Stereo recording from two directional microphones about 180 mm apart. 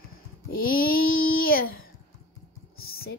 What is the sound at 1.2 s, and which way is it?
Child singing, 90° left.